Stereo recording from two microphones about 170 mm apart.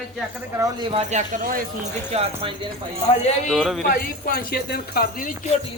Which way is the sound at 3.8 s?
55° left (ahead or behind).